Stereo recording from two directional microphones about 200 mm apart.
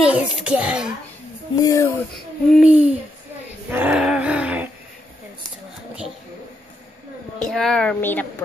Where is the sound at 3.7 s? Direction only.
5° right (ahead or behind).